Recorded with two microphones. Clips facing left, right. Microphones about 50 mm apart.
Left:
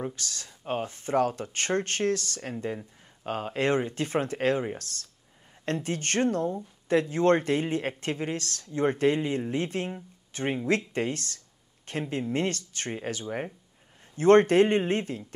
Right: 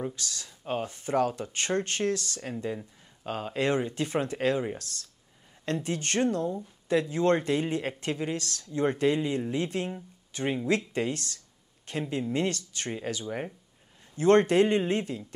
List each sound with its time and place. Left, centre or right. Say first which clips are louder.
0.1 s speech: even; left
5.7 s speech: left 1 dB; left
10.9 s a sound: even; left
12.1 s speech: even; left